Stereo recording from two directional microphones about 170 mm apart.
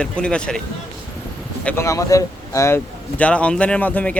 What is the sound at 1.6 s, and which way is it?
A man's voice, 15° left (ahead or behind).